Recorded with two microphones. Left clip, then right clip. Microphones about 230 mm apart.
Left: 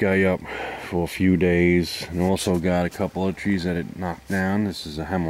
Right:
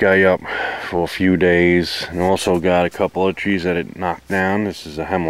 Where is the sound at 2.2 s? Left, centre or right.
Centre.